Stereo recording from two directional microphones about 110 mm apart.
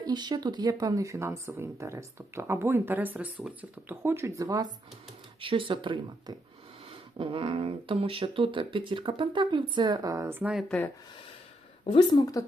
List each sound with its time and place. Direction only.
0.0 s speech: 40° right (ahead or behind)
5.4 s speech: 50° right (ahead or behind); by 10.2 s 35° right (ahead or behind)
10.2 s speech: 20° right (ahead or behind)
10.5 s speech: centre (ahead or behind)
11.9 s a woman's voice: 45° left (ahead or behind)